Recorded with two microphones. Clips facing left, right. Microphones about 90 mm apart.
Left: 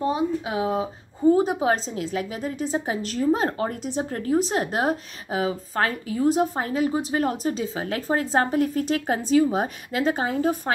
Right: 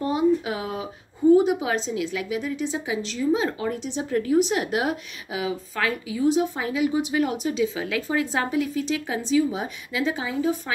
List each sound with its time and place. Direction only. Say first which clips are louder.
0.0 s speech: right 3 dB; 25° left (ahead or behind)
1.3 s speech: right 3 dB; 40° left (ahead or behind)